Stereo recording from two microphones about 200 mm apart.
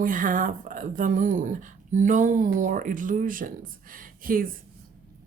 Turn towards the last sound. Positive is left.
turn(degrees=-45)  # may be behind; listen again after turning